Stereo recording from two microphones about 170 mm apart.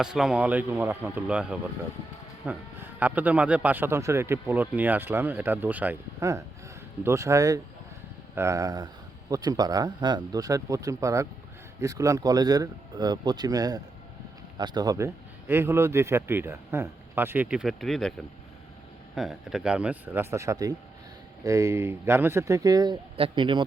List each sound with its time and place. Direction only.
0.0 s speech: 5° right (ahead or behind)
19.1 s speech: centre (ahead or behind); by 23.6 s 30° right (ahead or behind)